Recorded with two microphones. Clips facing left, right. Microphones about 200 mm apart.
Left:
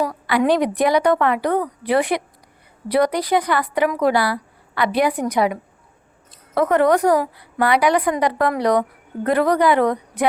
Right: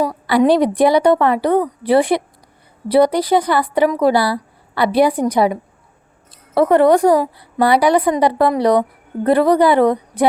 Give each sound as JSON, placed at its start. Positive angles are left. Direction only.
{"t": 0.3, "sound": "a woman's voice", "side_deg": -35}